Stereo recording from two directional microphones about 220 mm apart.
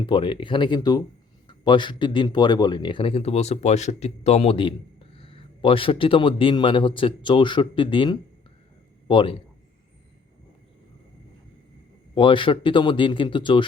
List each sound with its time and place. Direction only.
0.0 s a man's voice: 25° left (ahead or behind)
12.1 s speech: 20° left (ahead or behind)